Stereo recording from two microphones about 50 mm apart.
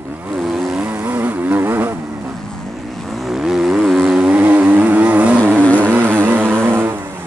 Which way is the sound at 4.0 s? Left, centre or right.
Right.